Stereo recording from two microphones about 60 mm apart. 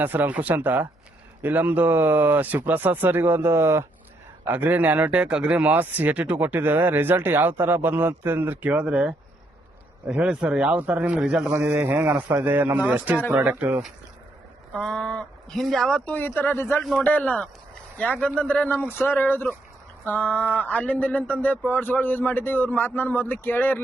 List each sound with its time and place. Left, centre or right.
0.0 s speech: right
4.4 s speech: right
5.7 s speech: right
11.2 s a man's voice: centre
11.7 s speech: right
14.7 s speech: centre
16.0 s a man's voice: left
18.9 s a man's voice: left
20.1 s a man's voice: left